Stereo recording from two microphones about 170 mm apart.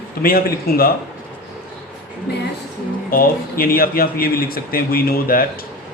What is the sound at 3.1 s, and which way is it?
Speech, 60° left (ahead or behind).